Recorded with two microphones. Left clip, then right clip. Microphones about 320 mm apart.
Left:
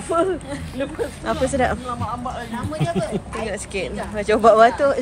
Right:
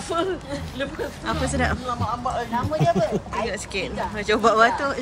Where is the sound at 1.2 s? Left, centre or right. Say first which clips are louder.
Left 4 dB; centre.